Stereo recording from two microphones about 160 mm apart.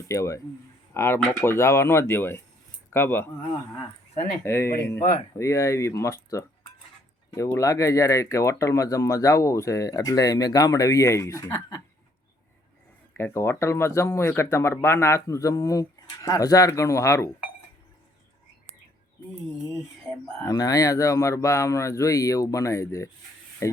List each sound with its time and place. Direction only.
0.1 s speech: 20° left (ahead or behind)
4.4 s speech: 15° left (ahead or behind)
7.3 s speech: 20° left (ahead or behind)
13.1 s speech: 15° left (ahead or behind)
20.4 s speech: 20° left (ahead or behind)